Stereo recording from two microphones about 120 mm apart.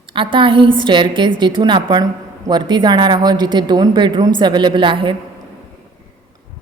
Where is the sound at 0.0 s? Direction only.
45° right (ahead or behind).